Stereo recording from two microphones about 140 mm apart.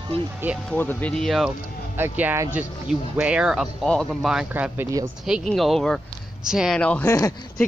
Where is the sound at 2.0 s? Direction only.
15° right (ahead or behind).